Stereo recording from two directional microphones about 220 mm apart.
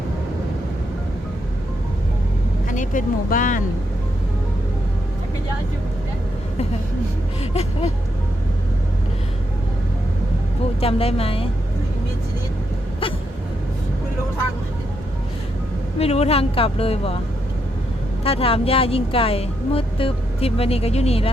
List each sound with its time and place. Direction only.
2.6 s speech: 35° left (ahead or behind)
7.5 s speech: 30° left (ahead or behind)
10.8 s speech: 25° left (ahead or behind)
16.0 s speech: 30° left (ahead or behind)
18.2 s speech: 25° left (ahead or behind)